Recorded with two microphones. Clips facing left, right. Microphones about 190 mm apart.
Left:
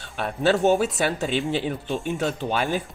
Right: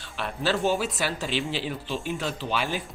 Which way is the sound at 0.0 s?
55° left (ahead or behind).